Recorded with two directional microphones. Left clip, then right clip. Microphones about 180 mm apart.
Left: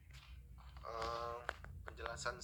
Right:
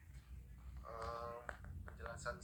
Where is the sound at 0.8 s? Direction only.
30° left (ahead or behind).